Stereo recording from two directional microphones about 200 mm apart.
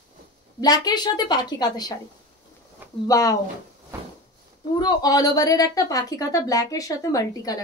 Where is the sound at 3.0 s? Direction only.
15° left (ahead or behind).